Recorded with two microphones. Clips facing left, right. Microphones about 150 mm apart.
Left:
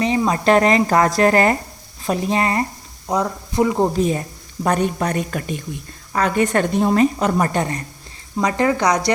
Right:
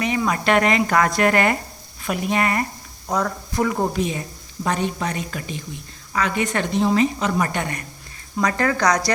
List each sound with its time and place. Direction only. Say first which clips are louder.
0.0 s speech: left 4 dB; 30° left (ahead or behind)
3.9 s a woman's voice: left 5 dB; 40° left (ahead or behind)
8.4 s speech: left 3 dB; 20° left (ahead or behind)